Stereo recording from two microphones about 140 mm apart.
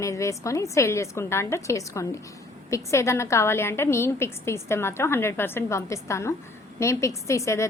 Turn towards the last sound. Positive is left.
turn(degrees=20)  # may be behind; listen again after turning